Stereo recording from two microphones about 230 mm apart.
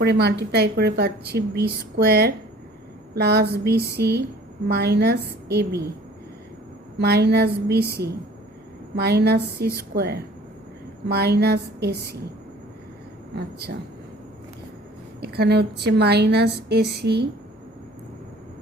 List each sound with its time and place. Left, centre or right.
0.0 s speech: right
7.0 s speech: right
13.3 s speech: right
15.2 s speech: right